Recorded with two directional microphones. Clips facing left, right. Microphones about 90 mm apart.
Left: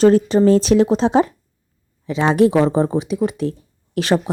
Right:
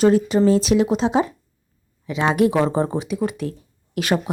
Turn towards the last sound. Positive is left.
turn(degrees=30)  # may be behind; listen again after turning